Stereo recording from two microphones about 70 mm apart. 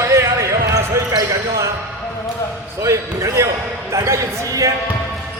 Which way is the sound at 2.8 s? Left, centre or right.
Right.